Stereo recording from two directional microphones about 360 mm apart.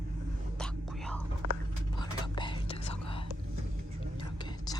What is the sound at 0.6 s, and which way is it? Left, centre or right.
Whispering, centre.